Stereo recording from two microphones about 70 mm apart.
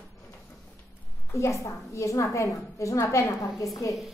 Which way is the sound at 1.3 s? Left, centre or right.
Left.